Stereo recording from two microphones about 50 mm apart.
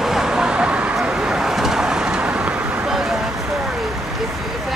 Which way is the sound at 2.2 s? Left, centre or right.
Right.